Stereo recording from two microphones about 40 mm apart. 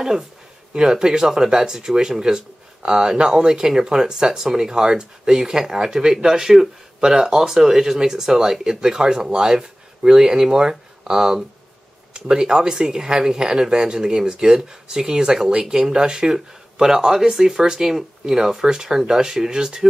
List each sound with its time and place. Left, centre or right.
0.7 s speech: centre